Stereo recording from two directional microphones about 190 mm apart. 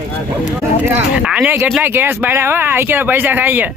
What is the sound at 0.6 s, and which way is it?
Speech, 10° right (ahead or behind).